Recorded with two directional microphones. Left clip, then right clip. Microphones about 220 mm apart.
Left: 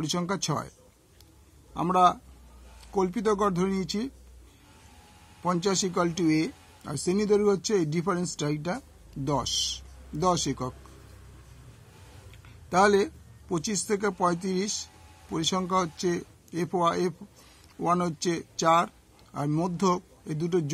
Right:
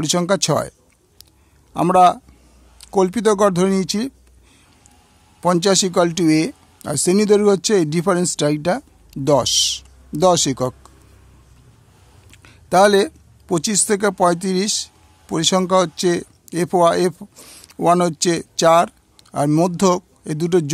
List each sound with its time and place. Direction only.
0.0 s a man's voice: 50° right (ahead or behind)
5.4 s speech: 50° right (ahead or behind)
12.4 s speech: 50° right (ahead or behind)